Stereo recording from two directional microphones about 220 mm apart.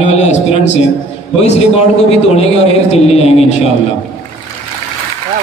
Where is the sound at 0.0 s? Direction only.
30° left (ahead or behind).